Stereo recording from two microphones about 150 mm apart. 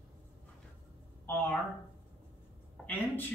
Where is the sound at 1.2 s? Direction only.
15° left (ahead or behind).